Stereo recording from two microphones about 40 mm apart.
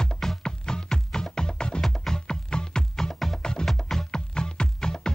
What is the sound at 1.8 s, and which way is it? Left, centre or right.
Music, centre.